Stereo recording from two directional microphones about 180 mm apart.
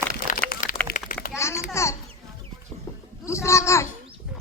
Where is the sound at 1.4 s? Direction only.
15° left (ahead or behind).